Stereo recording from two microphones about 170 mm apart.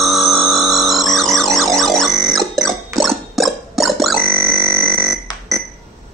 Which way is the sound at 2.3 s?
Centre (ahead or behind).